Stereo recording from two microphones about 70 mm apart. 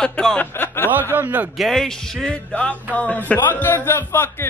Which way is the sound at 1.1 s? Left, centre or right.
Right.